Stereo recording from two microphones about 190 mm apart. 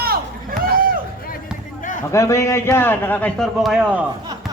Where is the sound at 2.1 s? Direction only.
15° left (ahead or behind); by 4.0 s 5° right (ahead or behind).